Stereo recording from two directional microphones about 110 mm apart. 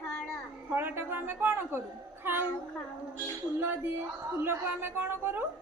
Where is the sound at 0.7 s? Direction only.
20° right (ahead or behind).